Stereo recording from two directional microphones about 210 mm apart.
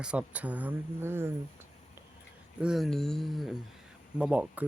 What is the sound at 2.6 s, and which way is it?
Speech, centre (ahead or behind).